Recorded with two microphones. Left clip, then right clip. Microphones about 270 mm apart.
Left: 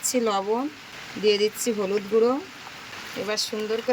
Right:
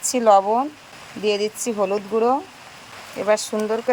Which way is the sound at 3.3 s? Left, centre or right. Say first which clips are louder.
Right 7 dB; right.